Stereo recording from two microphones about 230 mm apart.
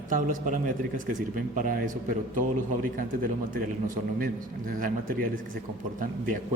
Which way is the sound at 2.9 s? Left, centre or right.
Right.